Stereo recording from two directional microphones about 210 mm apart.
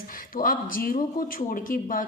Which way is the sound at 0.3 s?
40° left (ahead or behind).